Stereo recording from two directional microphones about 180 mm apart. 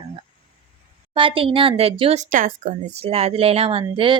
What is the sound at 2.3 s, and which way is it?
A woman's voice, 45° right (ahead or behind).